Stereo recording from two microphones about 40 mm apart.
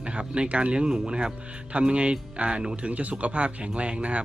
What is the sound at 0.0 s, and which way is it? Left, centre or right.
Music, right.